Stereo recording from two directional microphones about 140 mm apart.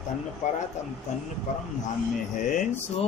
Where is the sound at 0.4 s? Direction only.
60° left (ahead or behind).